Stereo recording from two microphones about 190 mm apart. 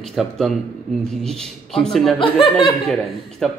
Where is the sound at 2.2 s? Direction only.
25° left (ahead or behind).